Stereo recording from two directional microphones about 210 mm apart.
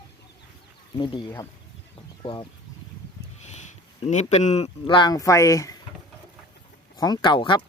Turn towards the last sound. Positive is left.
turn(degrees=20)  # may be behind; listen again after turning